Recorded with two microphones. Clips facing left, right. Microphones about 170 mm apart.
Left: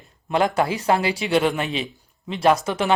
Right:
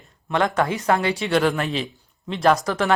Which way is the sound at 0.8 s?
30° left (ahead or behind).